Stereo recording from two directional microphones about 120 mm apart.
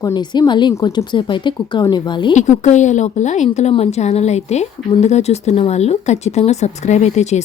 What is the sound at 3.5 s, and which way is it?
Speech, 65° left (ahead or behind).